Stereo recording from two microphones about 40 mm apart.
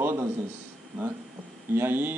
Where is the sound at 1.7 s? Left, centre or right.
Right.